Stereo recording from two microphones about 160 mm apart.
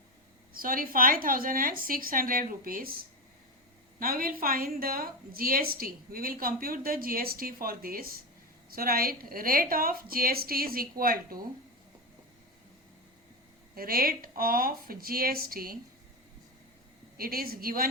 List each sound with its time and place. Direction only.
0.5 s a woman's voice: 65° right (ahead or behind)
13.7 s speech: 65° right (ahead or behind)
17.2 s a woman's voice: 65° right (ahead or behind)